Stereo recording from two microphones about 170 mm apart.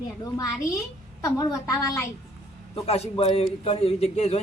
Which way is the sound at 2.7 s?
35° left (ahead or behind).